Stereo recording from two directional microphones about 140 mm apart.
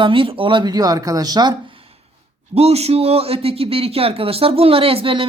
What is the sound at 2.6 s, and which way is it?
Speech, 45° right (ahead or behind).